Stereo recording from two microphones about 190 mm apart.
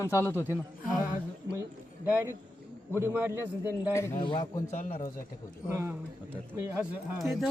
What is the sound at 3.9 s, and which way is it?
A man's voice, 15° left (ahead or behind).